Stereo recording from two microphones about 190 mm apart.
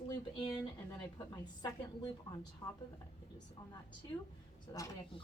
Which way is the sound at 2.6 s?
20° left (ahead or behind).